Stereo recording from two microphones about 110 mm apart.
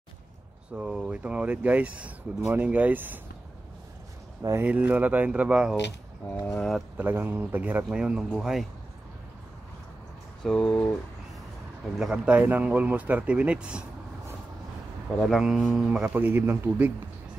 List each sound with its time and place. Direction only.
0.7 s speech: 10° right (ahead or behind)
4.4 s speech: 30° right (ahead or behind)
4.6 s speech: 15° right (ahead or behind)
7.0 s speech: 20° right (ahead or behind)
10.4 s speech: 5° left (ahead or behind)
12.0 s speech: 10° right (ahead or behind)
15.2 s speech: centre (ahead or behind); by 16.9 s 20° right (ahead or behind)